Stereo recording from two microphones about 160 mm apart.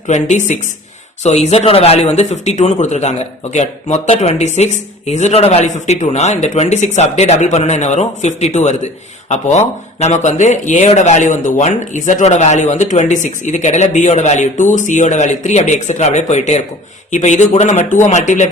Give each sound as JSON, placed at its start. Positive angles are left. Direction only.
{"t": 0.1, "sound": "speech", "side_deg": 50}